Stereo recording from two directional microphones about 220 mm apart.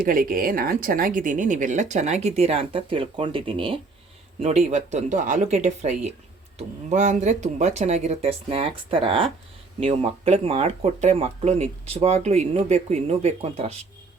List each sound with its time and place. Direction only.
0.0 s speech: 40° right (ahead or behind)